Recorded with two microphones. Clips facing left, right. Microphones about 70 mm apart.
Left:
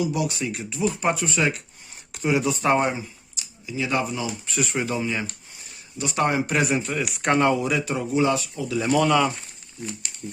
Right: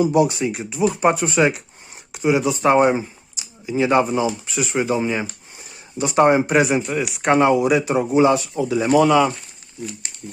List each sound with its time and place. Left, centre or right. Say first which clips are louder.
0.0 s speech: right 8 dB; right
2.1 s speech: right 4 dB; centre
3.7 s speech: right 8 dB; right
4.4 s speech: right 5 dB; centre
4.9 s speech: right 5 dB; right
6.6 s speech: right 5 dB; centre
9.0 s speech: right 5 dB; centre